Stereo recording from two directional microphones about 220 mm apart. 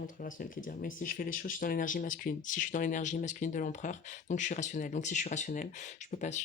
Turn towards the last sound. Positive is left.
turn(degrees=35)  # may be behind; listen again after turning